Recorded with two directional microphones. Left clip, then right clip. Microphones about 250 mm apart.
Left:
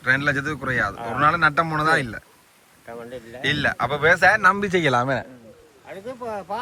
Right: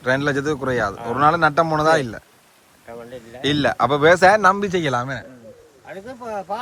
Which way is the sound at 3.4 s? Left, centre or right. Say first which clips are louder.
Right 3 dB; centre.